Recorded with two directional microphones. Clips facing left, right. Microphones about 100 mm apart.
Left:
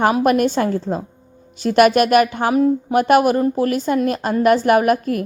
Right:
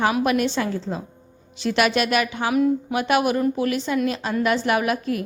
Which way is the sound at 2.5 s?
35° left (ahead or behind).